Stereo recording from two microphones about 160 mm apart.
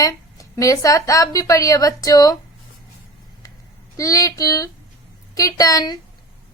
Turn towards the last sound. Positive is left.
turn(degrees=25)  # may be behind; listen again after turning